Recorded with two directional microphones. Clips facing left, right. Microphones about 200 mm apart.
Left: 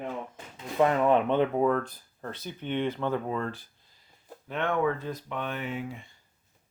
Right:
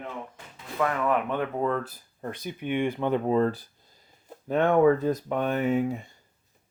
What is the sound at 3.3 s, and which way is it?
Speech, 35° right (ahead or behind).